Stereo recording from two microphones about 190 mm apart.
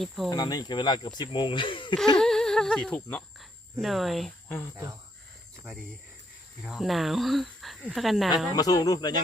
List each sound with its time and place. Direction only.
0.3 s speech: 20° left (ahead or behind)
2.1 s speech: 5° left (ahead or behind)
6.6 s speech: centre (ahead or behind)
8.5 s speech: 20° left (ahead or behind)